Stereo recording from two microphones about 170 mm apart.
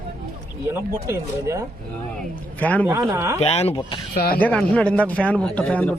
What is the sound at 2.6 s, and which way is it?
Speech, 10° left (ahead or behind).